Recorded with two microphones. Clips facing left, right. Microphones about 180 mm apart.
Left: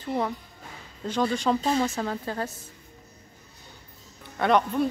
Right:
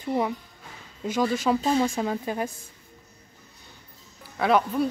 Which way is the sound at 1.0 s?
10° right (ahead or behind).